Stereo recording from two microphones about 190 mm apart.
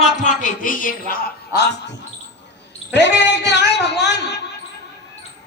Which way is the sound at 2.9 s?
65° left (ahead or behind).